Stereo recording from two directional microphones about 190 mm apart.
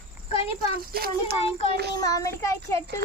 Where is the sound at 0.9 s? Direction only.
50° right (ahead or behind).